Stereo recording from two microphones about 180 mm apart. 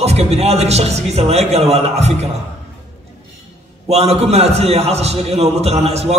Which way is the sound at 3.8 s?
35° right (ahead or behind).